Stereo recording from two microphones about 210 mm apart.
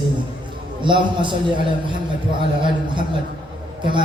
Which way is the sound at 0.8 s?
25° right (ahead or behind).